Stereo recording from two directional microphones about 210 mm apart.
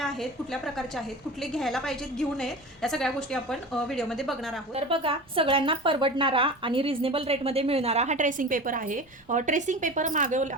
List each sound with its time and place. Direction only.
0.0 s a woman's voice: centre (ahead or behind)
4.7 s a woman's voice: 25° right (ahead or behind)